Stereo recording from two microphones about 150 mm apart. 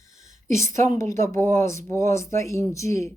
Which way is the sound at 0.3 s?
55° right (ahead or behind).